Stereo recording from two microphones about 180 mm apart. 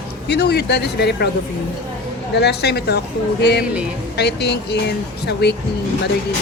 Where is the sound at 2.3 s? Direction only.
70° left (ahead or behind).